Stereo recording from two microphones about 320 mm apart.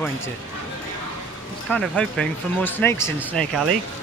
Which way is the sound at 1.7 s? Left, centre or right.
Centre.